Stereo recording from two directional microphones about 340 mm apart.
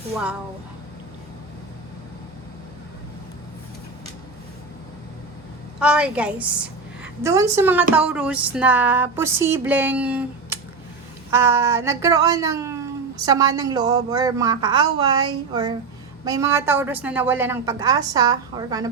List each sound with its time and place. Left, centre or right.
5.8 s a woman's voice: centre
7.9 s a sound: centre
11.3 s speech: centre